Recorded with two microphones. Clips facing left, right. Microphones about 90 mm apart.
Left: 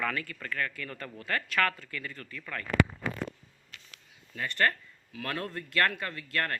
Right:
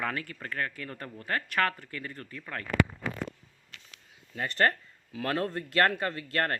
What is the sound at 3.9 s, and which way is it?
Speech, 25° right (ahead or behind).